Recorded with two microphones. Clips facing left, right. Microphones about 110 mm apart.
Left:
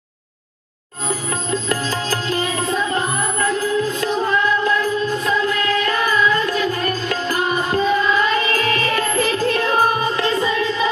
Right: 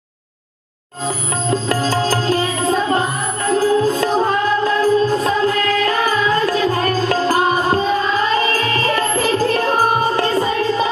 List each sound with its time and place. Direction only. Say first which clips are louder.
1.5 s music: right 5 dB; 35° right (ahead or behind)